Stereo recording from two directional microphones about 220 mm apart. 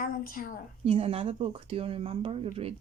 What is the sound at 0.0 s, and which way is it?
Speech, 40° left (ahead or behind).